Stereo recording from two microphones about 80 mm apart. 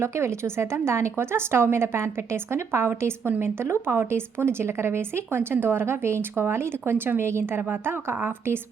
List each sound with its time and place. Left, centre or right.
0.0 s a woman's voice: right